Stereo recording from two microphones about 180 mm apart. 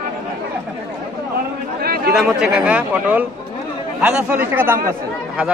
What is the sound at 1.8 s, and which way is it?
Chatter, 60° right (ahead or behind).